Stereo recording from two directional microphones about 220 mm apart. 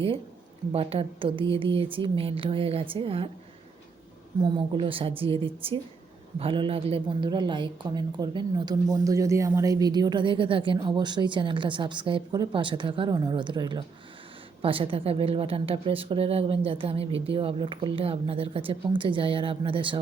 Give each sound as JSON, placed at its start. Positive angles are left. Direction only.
{"t": 0.7, "sound": "speech", "side_deg": -25}
{"t": 4.4, "sound": "speech", "side_deg": -20}